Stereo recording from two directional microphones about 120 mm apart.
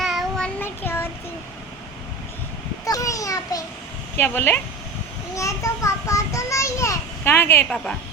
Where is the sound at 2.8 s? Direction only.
30° left (ahead or behind).